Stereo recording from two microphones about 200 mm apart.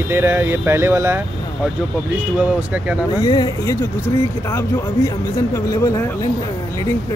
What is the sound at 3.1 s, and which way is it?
Speech, 20° left (ahead or behind).